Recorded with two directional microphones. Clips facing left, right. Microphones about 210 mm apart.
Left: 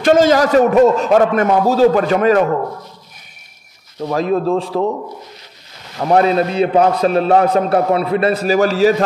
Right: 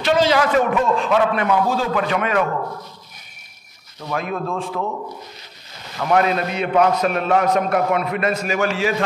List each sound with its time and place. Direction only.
0.0 s a man's voice: 45° left (ahead or behind)
4.0 s a man's voice: 35° left (ahead or behind)
5.9 s a man's voice: 35° left (ahead or behind)